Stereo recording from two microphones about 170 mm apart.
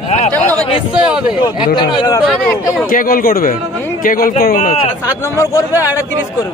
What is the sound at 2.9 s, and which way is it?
Speech, 55° left (ahead or behind).